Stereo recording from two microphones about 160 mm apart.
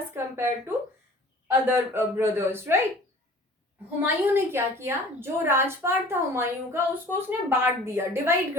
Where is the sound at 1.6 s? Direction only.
10° right (ahead or behind).